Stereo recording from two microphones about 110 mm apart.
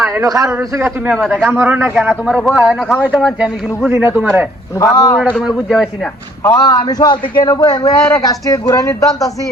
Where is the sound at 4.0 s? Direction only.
20° right (ahead or behind).